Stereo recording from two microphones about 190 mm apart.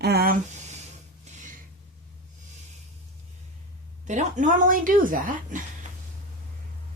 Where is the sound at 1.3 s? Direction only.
35° right (ahead or behind).